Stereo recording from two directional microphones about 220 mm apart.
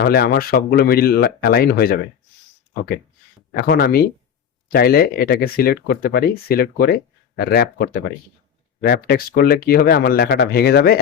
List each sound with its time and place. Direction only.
0.0 s speech: 45° left (ahead or behind)
3.5 s speech: 45° left (ahead or behind)